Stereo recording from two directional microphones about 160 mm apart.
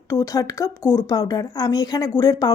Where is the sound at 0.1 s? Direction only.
20° left (ahead or behind).